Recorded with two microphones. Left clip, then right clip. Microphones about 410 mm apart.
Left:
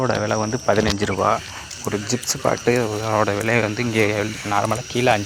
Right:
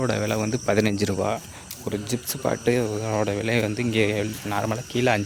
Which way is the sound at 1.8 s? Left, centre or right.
Right.